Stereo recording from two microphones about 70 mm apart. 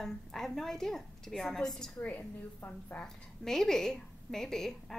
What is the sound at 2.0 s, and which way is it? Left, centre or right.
A woman's voice, left.